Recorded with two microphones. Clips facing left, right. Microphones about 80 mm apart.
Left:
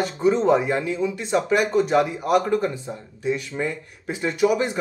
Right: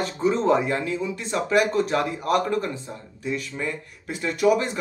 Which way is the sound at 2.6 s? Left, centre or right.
Centre.